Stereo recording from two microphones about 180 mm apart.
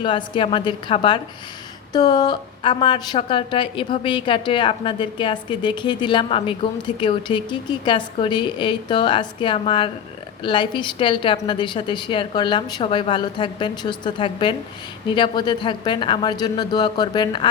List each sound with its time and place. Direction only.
0.0 s a woman's voice: 25° left (ahead or behind)